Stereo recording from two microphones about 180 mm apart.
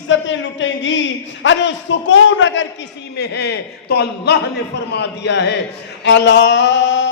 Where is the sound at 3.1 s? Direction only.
70° left (ahead or behind).